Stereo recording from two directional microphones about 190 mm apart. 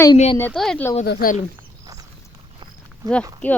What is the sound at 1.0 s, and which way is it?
Speech, 55° left (ahead or behind).